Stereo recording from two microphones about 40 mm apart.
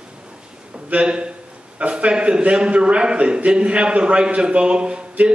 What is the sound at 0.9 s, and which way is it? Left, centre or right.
A man's voice, right.